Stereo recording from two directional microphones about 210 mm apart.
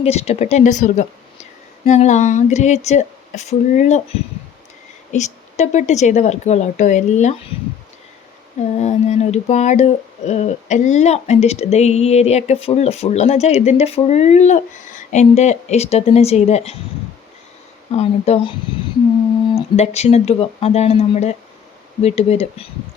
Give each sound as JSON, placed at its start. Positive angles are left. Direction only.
{"t": 0.0, "sound": "speech", "side_deg": 30}
{"t": 8.8, "sound": "speech", "side_deg": 30}
{"t": 17.9, "sound": "speech", "side_deg": 30}
{"t": 19.5, "sound": "speech", "side_deg": 30}